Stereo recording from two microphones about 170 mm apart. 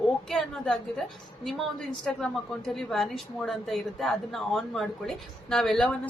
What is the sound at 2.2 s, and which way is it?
Speech, centre (ahead or behind).